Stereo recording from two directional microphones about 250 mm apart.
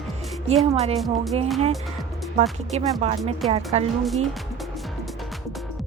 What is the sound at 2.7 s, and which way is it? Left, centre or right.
Speech, right.